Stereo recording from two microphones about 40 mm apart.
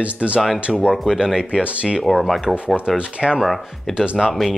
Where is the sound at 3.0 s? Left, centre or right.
Right.